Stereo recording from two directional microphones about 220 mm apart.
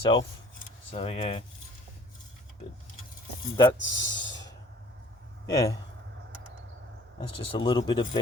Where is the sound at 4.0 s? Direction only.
55° left (ahead or behind).